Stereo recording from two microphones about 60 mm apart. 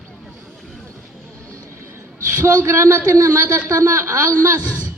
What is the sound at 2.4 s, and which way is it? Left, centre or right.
A man's voice, right.